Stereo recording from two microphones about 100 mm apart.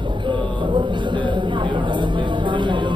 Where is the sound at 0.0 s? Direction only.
50° right (ahead or behind).